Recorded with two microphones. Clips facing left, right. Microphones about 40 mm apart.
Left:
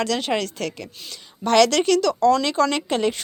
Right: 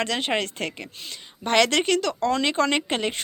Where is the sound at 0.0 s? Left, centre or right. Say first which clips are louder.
Left 2 dB; right.